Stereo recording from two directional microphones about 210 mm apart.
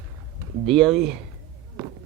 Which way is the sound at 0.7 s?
Centre (ahead or behind).